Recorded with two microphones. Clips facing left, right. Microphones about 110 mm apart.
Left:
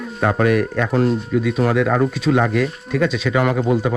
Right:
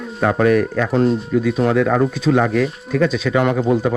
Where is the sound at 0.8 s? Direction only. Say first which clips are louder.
Right 1 dB; centre (ahead or behind).